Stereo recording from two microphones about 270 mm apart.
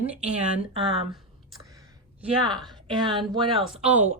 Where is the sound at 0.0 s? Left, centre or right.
Centre.